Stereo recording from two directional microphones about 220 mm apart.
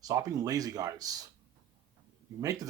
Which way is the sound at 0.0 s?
15° right (ahead or behind).